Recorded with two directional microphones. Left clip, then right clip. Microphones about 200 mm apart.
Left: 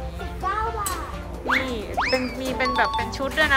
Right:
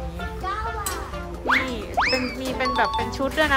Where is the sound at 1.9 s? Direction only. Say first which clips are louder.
Right 2 dB; 5° left (ahead or behind).